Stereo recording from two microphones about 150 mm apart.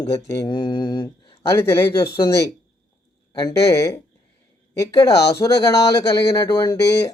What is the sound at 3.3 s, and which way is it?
Speech, 25° left (ahead or behind).